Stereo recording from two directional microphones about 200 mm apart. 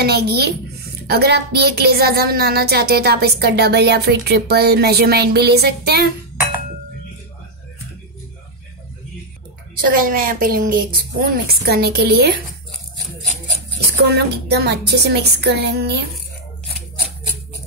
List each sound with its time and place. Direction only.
0.0 s a woman's voice: 55° right (ahead or behind)
9.8 s a woman's voice: 45° right (ahead or behind)
13.7 s a woman's voice: 55° right (ahead or behind)